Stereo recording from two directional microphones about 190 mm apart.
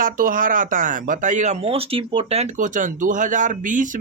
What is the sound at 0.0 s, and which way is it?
Speech, 45° right (ahead or behind).